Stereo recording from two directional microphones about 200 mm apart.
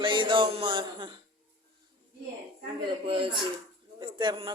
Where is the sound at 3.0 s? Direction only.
25° right (ahead or behind).